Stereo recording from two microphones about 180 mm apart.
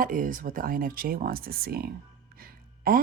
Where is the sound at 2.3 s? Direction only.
55° right (ahead or behind).